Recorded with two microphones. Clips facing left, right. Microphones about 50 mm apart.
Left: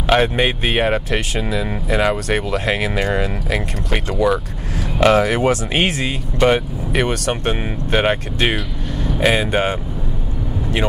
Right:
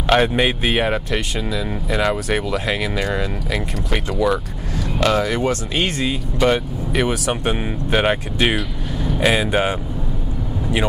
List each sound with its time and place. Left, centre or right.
0.0 s speech: centre
2.5 s speech: centre
2.8 s speech: centre
5.0 s speech: left
5.9 s speech: centre